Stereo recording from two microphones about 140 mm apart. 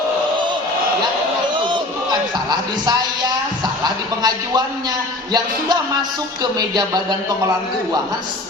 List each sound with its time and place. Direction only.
1.5 s a sound: 35° right (ahead or behind)
3.8 s a man's voice: 30° right (ahead or behind)
6.4 s music: 30° right (ahead or behind)